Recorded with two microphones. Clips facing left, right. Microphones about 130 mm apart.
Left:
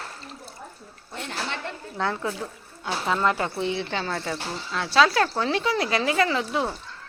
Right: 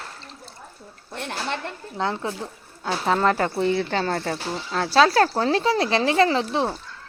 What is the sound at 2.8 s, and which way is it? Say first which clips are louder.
Speech: right 3 dB; 40° right (ahead or behind).